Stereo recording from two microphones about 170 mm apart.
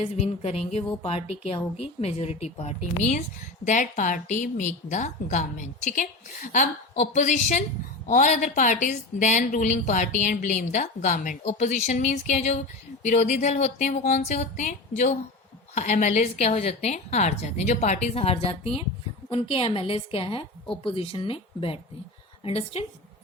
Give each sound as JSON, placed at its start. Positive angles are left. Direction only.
{"t": 0.0, "sound": "a woman's voice", "side_deg": 35}